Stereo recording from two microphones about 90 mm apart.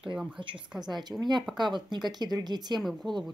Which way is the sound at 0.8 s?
50° right (ahead or behind).